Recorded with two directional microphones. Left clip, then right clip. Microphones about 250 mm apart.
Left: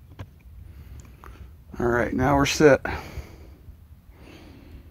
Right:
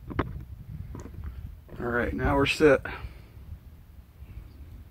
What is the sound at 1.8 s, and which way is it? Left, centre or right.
Speech, left.